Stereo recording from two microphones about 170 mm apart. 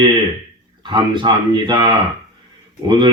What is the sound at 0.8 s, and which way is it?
Speech, 25° right (ahead or behind).